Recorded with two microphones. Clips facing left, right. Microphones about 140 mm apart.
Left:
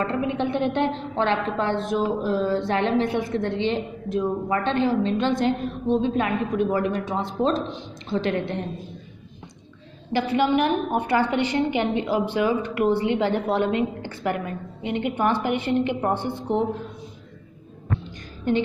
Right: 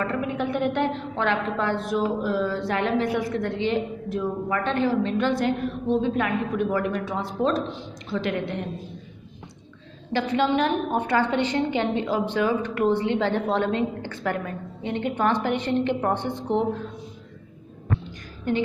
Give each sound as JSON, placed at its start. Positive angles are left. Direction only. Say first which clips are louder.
{"t": 0.0, "sound": "a woman's voice", "louder": "left 2 dB", "side_deg": 25}
{"t": 10.1, "sound": "a woman's voice", "louder": "left 1 dB", "side_deg": 10}
{"t": 18.5, "sound": "a woman's voice", "louder": "left 3 dB", "side_deg": 25}